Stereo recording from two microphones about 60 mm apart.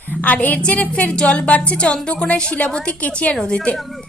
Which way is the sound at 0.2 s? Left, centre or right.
Left.